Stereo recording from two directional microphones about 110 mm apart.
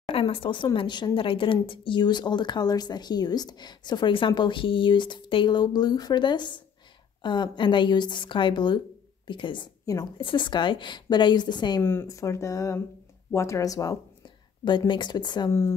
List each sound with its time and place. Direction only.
0.1 s speech: 55° left (ahead or behind); by 11.8 s 40° left (ahead or behind)
11.8 s speech: 20° left (ahead or behind)
14.6 s speech: 45° left (ahead or behind)